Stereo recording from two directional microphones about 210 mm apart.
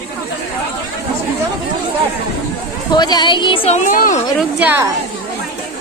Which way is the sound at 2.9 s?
20° left (ahead or behind).